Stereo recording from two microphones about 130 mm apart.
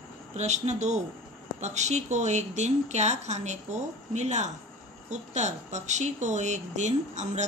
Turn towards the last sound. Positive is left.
turn(degrees=-65)  # may be behind; listen again after turning